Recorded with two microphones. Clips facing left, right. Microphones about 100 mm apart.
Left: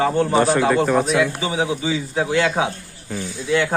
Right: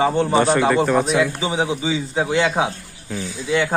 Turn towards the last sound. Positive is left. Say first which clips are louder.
# even
turn(degrees=-10)  # may be behind; listen again after turning